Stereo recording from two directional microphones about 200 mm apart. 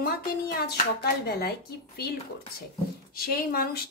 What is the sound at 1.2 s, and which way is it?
Speech, 50° left (ahead or behind).